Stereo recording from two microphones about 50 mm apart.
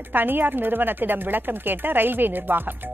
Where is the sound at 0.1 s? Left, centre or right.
Right.